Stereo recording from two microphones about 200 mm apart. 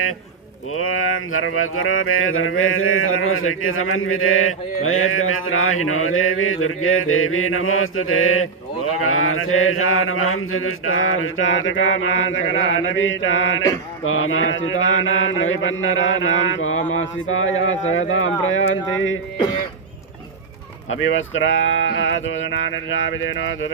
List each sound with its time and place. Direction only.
0.7 s mantra: 90° left; by 13.6 s 75° left (ahead or behind)
14.0 s mantra: 85° left
17.2 s speech: 80° left
21.0 s mantra: 70° left (ahead or behind)